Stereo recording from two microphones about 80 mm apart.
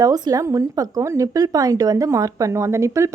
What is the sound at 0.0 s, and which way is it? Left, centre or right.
Speech, right.